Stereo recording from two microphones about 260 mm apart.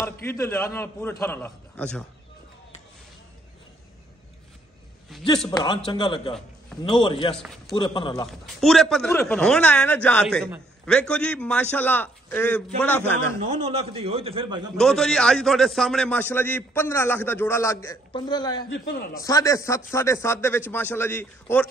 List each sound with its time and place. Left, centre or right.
0.0 s a man's voice: centre
5.1 s a sound: centre
5.5 s a man's voice: centre
7.3 s a man's voice: centre
7.7 s a man's voice: centre
8.3 s a man's voice: centre
13.4 s a man's voice: right
14.8 s a man's voice: centre
18.7 s a man's voice: left
19.2 s a man's voice: centre